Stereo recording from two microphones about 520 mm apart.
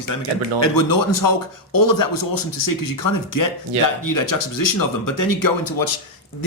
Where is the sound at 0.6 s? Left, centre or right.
Left.